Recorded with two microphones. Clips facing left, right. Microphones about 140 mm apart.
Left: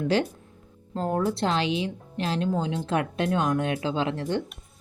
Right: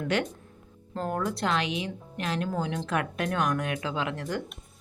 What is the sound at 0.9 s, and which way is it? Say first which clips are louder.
Speech: left 4 dB; 25° left (ahead or behind).